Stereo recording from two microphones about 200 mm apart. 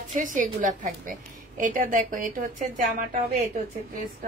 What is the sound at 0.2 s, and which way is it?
A woman's voice, 40° right (ahead or behind).